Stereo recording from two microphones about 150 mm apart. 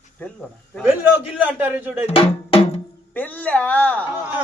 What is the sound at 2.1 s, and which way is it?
Music, 40° left (ahead or behind).